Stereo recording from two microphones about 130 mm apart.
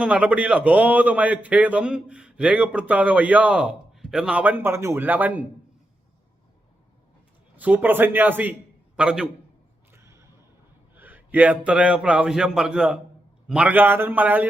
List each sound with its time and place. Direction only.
0.0 s a man's voice: 10° right (ahead or behind)
7.5 s a man's voice: 10° right (ahead or behind)
9.9 s a sound: 20° right (ahead or behind)
10.9 s a man's voice: 15° right (ahead or behind)